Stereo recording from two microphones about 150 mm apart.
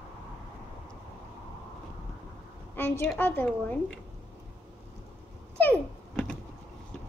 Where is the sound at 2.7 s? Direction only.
10° left (ahead or behind).